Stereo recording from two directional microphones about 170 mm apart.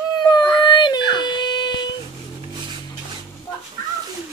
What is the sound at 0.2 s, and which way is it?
Dog, 25° left (ahead or behind).